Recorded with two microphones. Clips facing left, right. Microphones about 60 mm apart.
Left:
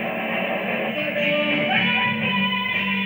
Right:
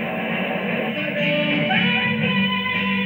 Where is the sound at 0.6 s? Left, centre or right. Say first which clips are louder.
Right 1 dB; centre.